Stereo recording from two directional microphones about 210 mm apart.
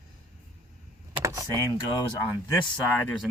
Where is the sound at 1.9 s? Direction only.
20° left (ahead or behind).